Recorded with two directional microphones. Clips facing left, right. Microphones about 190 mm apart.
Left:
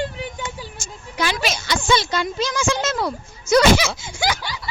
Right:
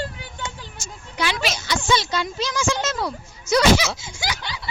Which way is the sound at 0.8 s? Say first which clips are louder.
Left 1 dB; 45° left (ahead or behind).